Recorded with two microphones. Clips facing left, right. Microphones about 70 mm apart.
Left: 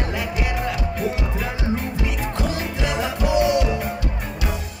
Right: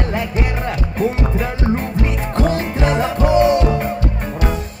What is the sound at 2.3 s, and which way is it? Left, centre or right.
Music, right.